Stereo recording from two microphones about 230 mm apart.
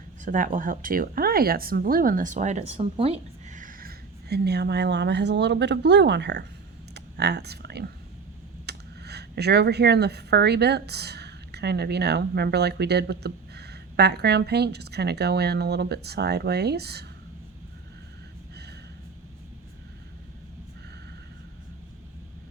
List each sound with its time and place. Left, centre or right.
0.3 s speech: right
6.9 s a sound: right
8.6 s speech: right